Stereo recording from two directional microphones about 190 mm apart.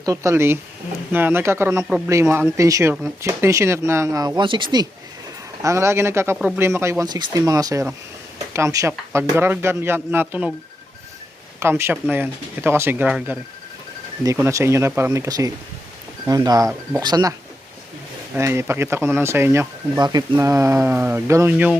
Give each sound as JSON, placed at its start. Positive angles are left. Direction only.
{"t": 0.0, "sound": "speech", "side_deg": -15}
{"t": 11.6, "sound": "speech", "side_deg": -10}
{"t": 18.3, "sound": "speech", "side_deg": -15}